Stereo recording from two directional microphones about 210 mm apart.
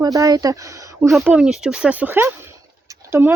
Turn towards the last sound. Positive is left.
turn(degrees=-10)  # may be behind; listen again after turning